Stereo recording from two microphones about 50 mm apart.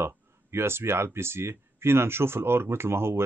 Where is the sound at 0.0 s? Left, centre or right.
Right.